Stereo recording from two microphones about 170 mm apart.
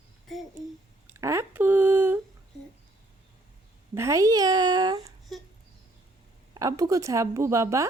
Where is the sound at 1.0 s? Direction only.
15° right (ahead or behind).